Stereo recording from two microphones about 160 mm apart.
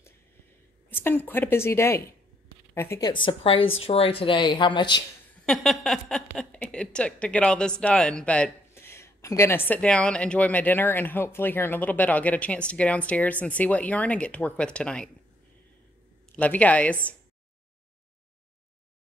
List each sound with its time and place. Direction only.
0.8 s speech: 15° left (ahead or behind)
3.1 s a woman's voice: 30° left (ahead or behind)
5.4 s speech: 5° left (ahead or behind)
16.3 s speech: 10° left (ahead or behind)